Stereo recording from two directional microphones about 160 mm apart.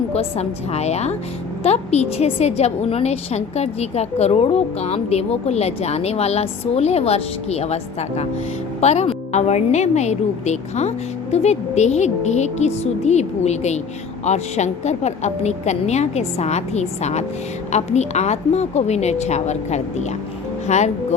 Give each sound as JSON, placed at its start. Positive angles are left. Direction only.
{"t": 0.1, "sound": "a woman's voice", "side_deg": 40}